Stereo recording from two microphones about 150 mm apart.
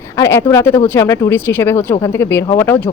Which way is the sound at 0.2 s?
15° left (ahead or behind).